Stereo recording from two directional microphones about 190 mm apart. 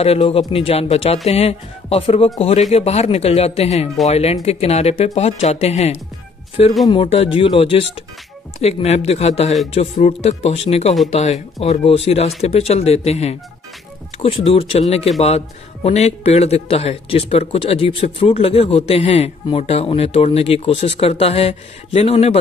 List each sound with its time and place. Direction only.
0.0 s speech: 30° left (ahead or behind)